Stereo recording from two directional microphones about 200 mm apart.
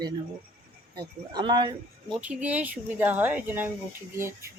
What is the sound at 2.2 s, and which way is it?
Speech, 5° right (ahead or behind).